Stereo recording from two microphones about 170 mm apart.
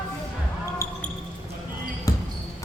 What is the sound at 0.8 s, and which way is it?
Basketball bounce, 15° left (ahead or behind).